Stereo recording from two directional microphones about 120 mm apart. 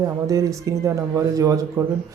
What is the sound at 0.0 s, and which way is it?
Speech, 25° right (ahead or behind).